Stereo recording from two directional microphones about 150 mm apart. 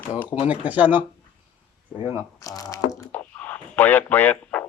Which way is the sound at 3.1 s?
10° left (ahead or behind).